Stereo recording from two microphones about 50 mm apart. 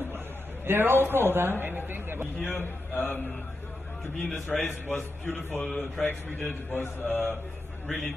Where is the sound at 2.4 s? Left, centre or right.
Left.